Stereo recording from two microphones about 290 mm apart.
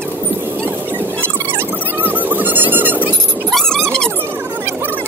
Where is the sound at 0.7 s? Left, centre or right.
Centre.